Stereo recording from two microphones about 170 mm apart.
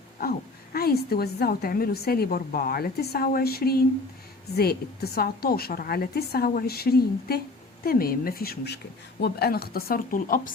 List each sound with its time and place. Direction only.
0.2 s a woman's voice: 60° left (ahead or behind)